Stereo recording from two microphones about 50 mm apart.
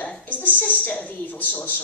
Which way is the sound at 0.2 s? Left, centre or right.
Left.